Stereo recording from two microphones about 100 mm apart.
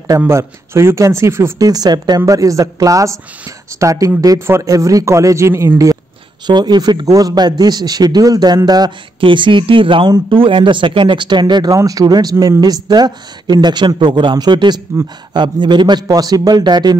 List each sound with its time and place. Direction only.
0.3 s a man's voice: 25° right (ahead or behind)
1.7 s a woman's voice: 40° right (ahead or behind)
6.4 s speech: 45° right (ahead or behind)
11.7 s speech: 35° right (ahead or behind)